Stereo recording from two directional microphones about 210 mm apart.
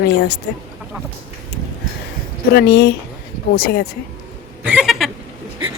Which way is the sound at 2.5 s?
50° left (ahead or behind).